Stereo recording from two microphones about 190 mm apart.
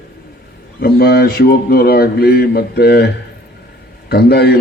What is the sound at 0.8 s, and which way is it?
A man's voice, 55° left (ahead or behind).